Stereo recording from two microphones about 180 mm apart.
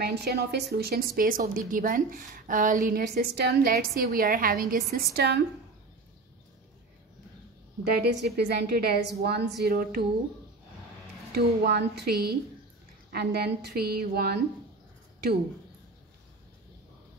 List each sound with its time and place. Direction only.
0.0 s a woman's voice: 65° right (ahead or behind)
8.0 s a woman's voice: 70° right (ahead or behind)
11.3 s a woman's voice: 65° right (ahead or behind)